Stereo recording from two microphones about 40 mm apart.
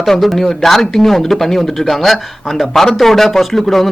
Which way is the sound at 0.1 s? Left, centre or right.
Centre.